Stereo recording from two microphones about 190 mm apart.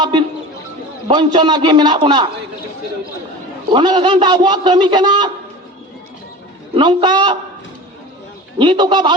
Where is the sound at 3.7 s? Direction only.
25° right (ahead or behind).